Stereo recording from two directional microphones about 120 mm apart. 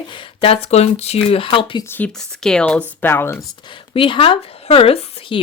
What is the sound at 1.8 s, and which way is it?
Speech, 20° left (ahead or behind).